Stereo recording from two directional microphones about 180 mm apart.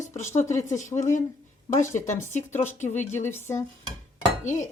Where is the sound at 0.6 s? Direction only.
40° left (ahead or behind).